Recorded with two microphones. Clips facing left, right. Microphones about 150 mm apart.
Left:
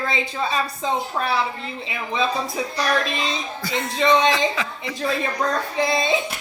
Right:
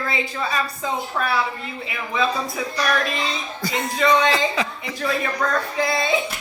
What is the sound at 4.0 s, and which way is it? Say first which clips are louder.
Speech: left 1 dB; 20° left (ahead or behind).